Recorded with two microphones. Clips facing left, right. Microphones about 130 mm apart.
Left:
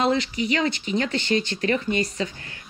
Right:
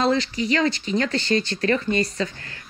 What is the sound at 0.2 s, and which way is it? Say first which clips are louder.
Speech: right 2 dB; 35° right (ahead or behind).